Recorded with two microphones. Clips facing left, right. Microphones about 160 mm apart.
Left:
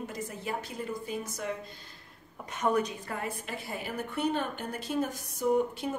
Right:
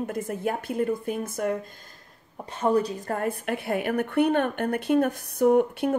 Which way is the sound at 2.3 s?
30° right (ahead or behind).